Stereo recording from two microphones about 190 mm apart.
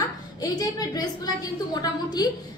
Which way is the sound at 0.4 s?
20° left (ahead or behind).